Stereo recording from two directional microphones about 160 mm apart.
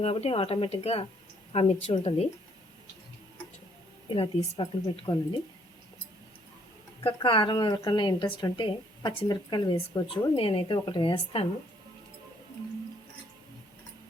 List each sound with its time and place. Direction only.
0.0 s a woman's voice: 40° left (ahead or behind)
4.1 s a woman's voice: 35° left (ahead or behind)
7.0 s a woman's voice: 30° left (ahead or behind)